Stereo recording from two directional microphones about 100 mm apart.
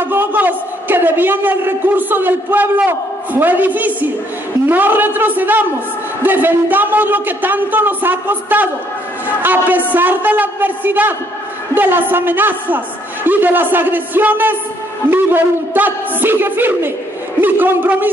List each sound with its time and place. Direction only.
0.0 s a man's voice: 20° right (ahead or behind)